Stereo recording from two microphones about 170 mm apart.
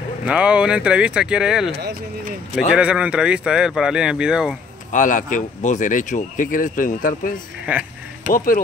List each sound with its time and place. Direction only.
0.2 s speech: 5° right (ahead or behind)
4.9 s speech: 50° left (ahead or behind)